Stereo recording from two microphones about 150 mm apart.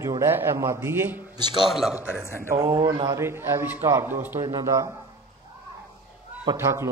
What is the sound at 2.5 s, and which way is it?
A man's voice, 25° right (ahead or behind).